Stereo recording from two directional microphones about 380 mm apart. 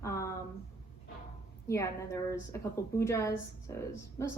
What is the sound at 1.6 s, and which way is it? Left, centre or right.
A woman's voice, centre.